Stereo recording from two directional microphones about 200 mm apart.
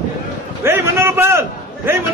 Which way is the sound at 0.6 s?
10° right (ahead or behind).